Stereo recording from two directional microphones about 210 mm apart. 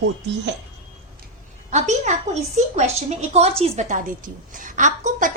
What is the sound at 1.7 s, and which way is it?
A woman's voice, 35° right (ahead or behind).